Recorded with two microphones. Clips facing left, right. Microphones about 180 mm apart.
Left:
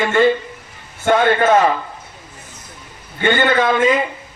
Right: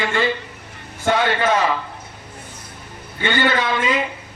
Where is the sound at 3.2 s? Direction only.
50° left (ahead or behind).